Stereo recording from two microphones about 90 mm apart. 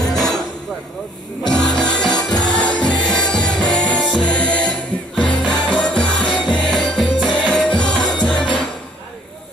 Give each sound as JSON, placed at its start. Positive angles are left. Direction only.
{"t": 0.0, "sound": "hammer", "side_deg": 45}
{"t": 1.5, "sound": "music", "side_deg": 10}